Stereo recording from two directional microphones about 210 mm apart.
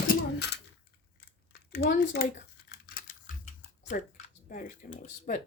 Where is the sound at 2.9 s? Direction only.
40° left (ahead or behind).